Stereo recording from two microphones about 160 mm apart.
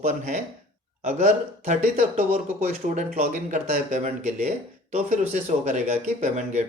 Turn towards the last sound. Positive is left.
turn(degrees=-50)  # may be behind; listen again after turning